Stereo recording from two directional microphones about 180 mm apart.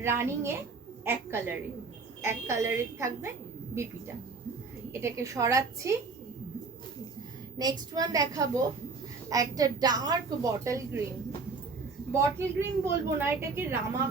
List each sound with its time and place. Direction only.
0.0 s a woman's voice: 15° right (ahead or behind)
4.9 s a woman's voice: 15° right (ahead or behind)
7.6 s a woman's voice: 20° right (ahead or behind)
12.1 s a woman's voice: 15° right (ahead or behind)